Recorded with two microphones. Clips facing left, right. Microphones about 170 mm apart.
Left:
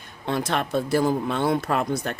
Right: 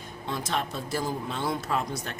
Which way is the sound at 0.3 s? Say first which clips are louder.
Left 6 dB; 65° left (ahead or behind).